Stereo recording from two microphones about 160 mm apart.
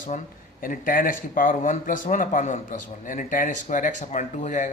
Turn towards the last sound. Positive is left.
turn(degrees=50)  # may be behind; listen again after turning